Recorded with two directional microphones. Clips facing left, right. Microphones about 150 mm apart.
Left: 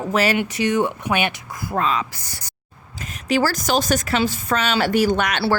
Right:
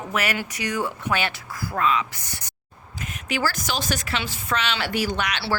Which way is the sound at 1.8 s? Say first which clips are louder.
Left 1 dB; 35° left (ahead or behind).